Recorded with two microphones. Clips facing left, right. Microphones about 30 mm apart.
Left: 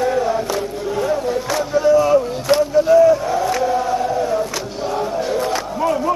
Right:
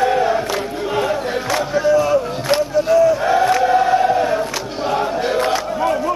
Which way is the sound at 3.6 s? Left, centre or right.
Right.